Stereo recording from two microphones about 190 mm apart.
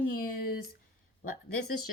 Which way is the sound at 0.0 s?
45° left (ahead or behind).